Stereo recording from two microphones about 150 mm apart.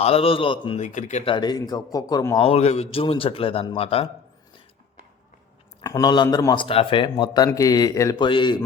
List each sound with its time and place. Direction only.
0.0 s a man's voice: 40° left (ahead or behind)
0.8 s speech: 55° left (ahead or behind)
1.2 s a man's voice: 30° left (ahead or behind)
5.8 s a man's voice: 25° left (ahead or behind)